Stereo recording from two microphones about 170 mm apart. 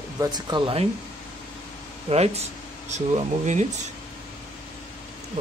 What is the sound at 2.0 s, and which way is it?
Speech, 35° right (ahead or behind).